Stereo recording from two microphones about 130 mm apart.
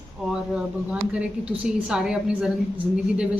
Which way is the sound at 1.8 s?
5° right (ahead or behind).